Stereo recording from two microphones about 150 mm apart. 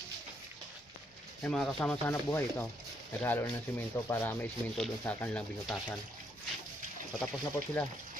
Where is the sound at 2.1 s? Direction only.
15° left (ahead or behind).